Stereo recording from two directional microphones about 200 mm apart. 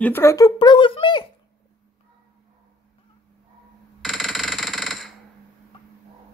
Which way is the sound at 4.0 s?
Centre (ahead or behind).